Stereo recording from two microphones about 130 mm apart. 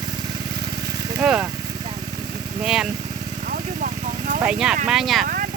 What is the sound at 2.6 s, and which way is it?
Speech, 5° right (ahead or behind).